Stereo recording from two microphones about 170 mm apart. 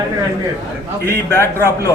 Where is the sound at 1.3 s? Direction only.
15° left (ahead or behind).